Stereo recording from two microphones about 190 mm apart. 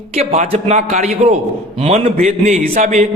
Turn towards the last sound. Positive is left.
turn(degrees=-40)  # may be behind; listen again after turning